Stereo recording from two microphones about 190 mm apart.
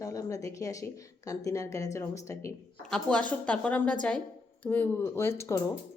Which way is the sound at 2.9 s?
5° left (ahead or behind).